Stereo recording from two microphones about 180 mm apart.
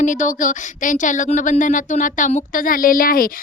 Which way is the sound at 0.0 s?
45° left (ahead or behind).